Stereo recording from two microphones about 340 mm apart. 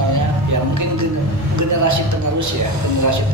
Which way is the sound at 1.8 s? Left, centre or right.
Right.